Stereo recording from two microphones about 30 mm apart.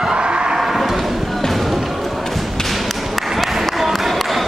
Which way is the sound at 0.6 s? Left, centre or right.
Centre.